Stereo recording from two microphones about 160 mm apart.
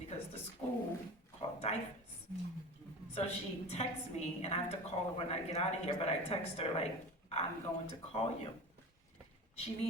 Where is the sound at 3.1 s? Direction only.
40° left (ahead or behind).